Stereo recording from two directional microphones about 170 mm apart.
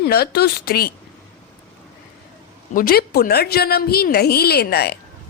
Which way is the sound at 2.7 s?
65° left (ahead or behind).